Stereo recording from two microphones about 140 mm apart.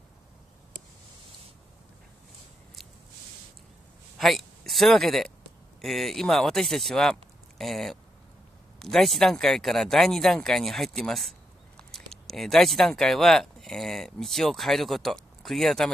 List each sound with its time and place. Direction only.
4.2 s speech: centre (ahead or behind)